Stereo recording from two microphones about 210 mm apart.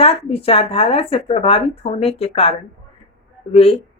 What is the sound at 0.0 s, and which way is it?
Speech, 30° left (ahead or behind).